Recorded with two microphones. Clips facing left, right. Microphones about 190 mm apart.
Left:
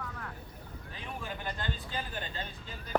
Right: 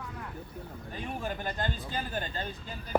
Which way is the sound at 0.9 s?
45° right (ahead or behind).